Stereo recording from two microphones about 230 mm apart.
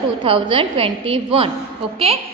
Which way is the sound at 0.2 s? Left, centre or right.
Right.